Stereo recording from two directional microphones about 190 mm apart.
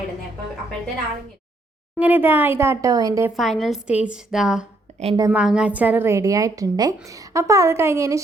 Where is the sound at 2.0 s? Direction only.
10° right (ahead or behind).